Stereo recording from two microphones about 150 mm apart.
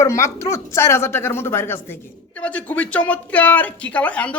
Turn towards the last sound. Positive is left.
turn(degrees=10)  # may be behind; listen again after turning